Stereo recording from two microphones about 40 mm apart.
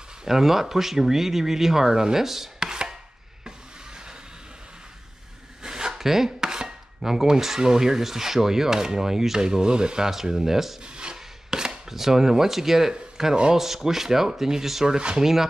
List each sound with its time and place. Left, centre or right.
0.2 s speech: centre
3.4 s a sound: centre
5.6 s chopping: centre
7.0 s speech: centre
10.8 s a sound: right
11.1 s chopping: centre
13.2 s speech: centre
15.0 s speech: right